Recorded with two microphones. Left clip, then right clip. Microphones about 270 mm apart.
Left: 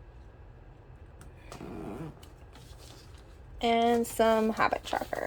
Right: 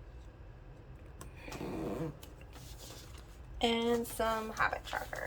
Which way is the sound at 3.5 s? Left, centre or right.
Centre.